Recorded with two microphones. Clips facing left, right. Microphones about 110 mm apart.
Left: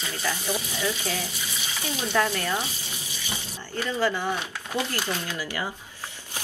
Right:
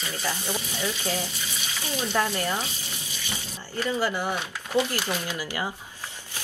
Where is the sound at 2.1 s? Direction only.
15° right (ahead or behind).